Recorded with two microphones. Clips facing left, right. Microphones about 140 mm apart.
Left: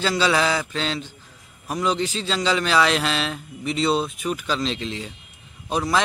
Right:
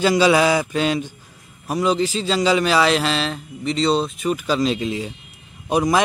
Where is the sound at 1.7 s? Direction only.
5° right (ahead or behind).